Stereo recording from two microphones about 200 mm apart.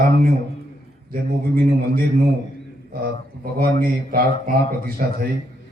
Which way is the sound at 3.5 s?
45° right (ahead or behind).